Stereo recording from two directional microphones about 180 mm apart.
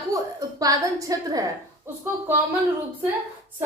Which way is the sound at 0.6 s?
20° right (ahead or behind).